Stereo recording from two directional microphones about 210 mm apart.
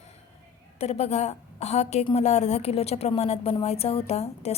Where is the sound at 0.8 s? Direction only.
30° left (ahead or behind).